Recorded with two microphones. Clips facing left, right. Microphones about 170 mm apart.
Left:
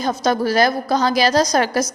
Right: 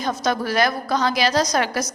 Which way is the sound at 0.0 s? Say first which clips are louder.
Left 4 dB; 35° left (ahead or behind).